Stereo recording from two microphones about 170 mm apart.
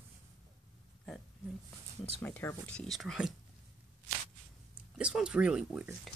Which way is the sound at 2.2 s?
10° left (ahead or behind).